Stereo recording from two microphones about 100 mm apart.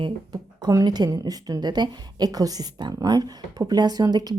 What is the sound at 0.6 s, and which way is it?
A woman's voice, 40° right (ahead or behind).